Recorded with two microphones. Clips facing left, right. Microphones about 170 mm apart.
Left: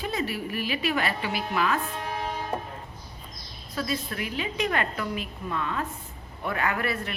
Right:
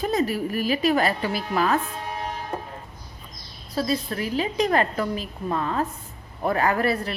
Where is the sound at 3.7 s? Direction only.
35° right (ahead or behind).